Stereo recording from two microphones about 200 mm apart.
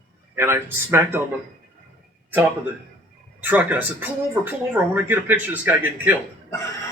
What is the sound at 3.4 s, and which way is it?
Speech, 10° right (ahead or behind).